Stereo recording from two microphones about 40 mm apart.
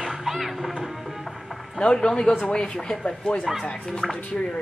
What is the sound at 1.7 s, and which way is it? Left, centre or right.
A man's voice, left.